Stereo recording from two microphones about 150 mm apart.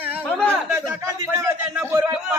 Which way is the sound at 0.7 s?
20° right (ahead or behind).